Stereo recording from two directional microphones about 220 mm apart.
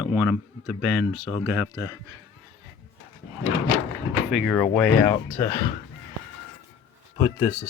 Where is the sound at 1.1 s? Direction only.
20° left (ahead or behind).